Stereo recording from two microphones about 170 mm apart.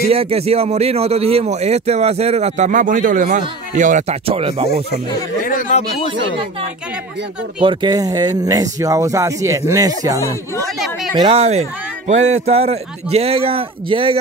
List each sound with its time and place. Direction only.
0.1 s a man's voice: 35° right (ahead or behind)
4.3 s a man's voice: 35° right (ahead or behind)
4.9 s speech: 55° left (ahead or behind)
7.6 s speech: 30° right (ahead or behind)
11.1 s a man's voice: 35° right (ahead or behind)